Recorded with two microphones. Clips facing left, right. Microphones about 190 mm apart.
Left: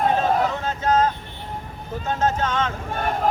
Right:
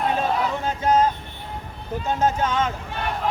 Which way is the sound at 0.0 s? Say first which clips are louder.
Left 3 dB; 45° left (ahead or behind).